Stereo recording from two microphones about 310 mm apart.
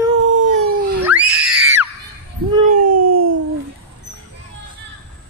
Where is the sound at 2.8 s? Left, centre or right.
Right.